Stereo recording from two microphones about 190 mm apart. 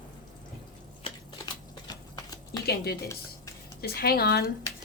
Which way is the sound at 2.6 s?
55° left (ahead or behind).